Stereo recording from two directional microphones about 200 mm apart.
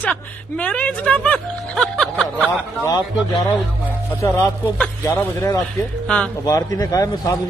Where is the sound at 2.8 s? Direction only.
20° left (ahead or behind).